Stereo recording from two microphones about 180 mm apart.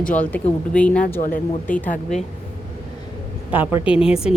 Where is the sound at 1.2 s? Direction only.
50° left (ahead or behind).